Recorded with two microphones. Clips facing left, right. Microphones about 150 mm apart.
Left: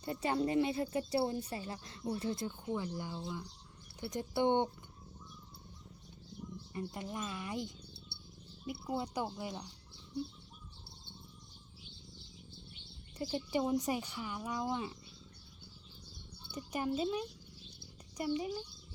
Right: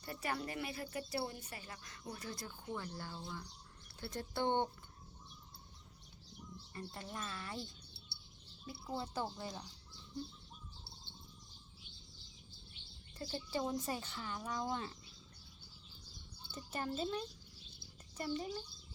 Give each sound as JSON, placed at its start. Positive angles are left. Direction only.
{"t": 0.0, "sound": "speech", "side_deg": 25}
{"t": 6.7, "sound": "speech", "side_deg": 15}
{"t": 8.1, "sound": "cricket", "side_deg": 60}
{"t": 8.6, "sound": "speech", "side_deg": 15}
{"t": 13.1, "sound": "speech", "side_deg": 15}
{"t": 16.5, "sound": "speech", "side_deg": 15}